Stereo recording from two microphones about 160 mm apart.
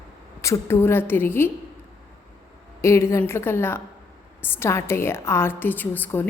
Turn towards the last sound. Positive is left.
turn(degrees=10)  # may be behind; listen again after turning